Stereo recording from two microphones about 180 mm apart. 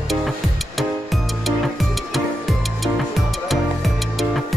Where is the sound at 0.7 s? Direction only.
Centre (ahead or behind).